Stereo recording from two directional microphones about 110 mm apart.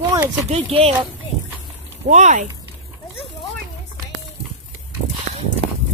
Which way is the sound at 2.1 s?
90° right.